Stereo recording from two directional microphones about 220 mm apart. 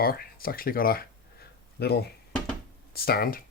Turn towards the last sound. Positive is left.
turn(degrees=45)  # may be behind; listen again after turning